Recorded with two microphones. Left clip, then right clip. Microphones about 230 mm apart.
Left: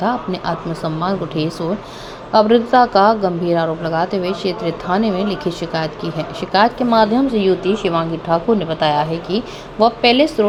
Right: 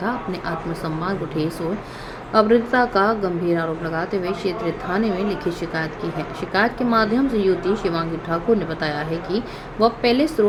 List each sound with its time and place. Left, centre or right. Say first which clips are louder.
1.0 s a woman's voice: left 4 dB; centre